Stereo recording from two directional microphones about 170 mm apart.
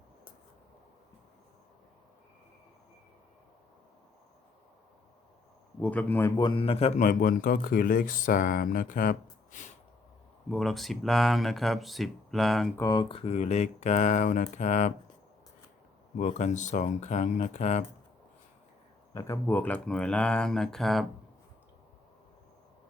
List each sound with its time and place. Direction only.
5.8 s a man's voice: 10° left (ahead or behind); by 9.1 s 50° left (ahead or behind)
9.5 s a sound: 50° left (ahead or behind)
10.5 s speech: centre (ahead or behind)
12.7 s a man's voice: 20° left (ahead or behind); by 14.9 s 45° left (ahead or behind)
16.1 s a man's voice: 45° left (ahead or behind)
19.1 s speech: 15° left (ahead or behind)